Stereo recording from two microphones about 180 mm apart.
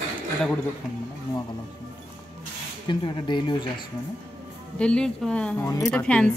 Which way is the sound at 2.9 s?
25° left (ahead or behind).